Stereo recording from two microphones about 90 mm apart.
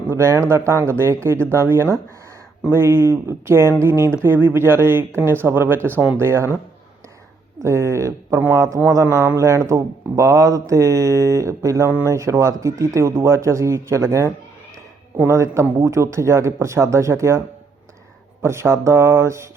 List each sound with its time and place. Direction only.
0.1 s speech: 30° right (ahead or behind)
7.6 s speech: 35° right (ahead or behind)
18.4 s speech: 30° right (ahead or behind)